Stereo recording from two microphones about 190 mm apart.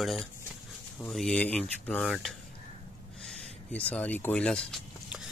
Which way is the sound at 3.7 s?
5° left (ahead or behind).